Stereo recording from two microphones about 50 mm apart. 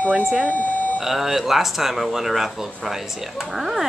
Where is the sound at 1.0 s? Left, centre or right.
Centre.